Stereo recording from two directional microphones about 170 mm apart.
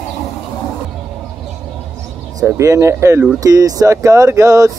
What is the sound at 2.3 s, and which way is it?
Speech, 15° right (ahead or behind).